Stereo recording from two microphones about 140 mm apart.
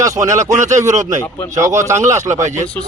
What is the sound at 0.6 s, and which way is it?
Speech, 60° right (ahead or behind).